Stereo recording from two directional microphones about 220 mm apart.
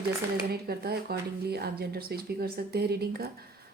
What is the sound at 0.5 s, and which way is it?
Speech, 45° right (ahead or behind).